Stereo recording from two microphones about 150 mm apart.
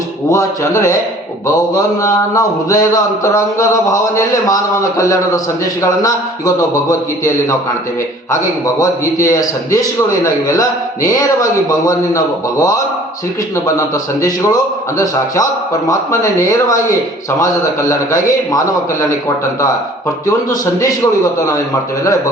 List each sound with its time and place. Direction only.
0.3 s mantra: 20° left (ahead or behind)
8.3 s mantra: 20° left (ahead or behind)
11.9 s mantra: 25° left (ahead or behind)
20.2 s mantra: 25° left (ahead or behind)